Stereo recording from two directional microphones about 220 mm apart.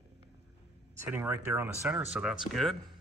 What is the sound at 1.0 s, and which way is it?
Speech, 10° right (ahead or behind).